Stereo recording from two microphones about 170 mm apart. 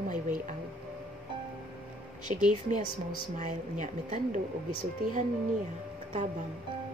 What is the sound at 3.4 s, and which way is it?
A woman's voice, 45° right (ahead or behind).